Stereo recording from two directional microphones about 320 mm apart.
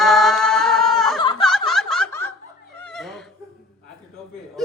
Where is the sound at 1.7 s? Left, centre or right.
Centre.